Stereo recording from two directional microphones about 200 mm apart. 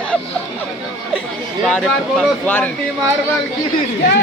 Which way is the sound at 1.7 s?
5° left (ahead or behind).